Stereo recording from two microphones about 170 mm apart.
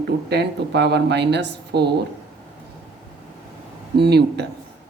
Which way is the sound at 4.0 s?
75° right (ahead or behind).